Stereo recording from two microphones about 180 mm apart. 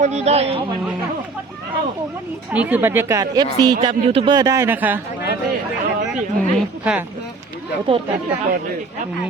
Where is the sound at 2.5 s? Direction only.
10° right (ahead or behind); by 4.4 s 30° right (ahead or behind).